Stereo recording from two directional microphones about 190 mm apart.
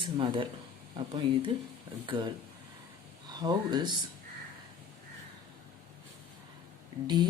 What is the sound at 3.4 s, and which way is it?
Speech, 20° right (ahead or behind).